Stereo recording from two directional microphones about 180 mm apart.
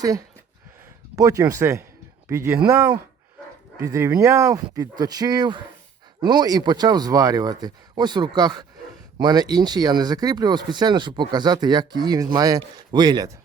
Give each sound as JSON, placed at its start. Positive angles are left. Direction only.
{"t": 0.0, "sound": "speech", "side_deg": -20}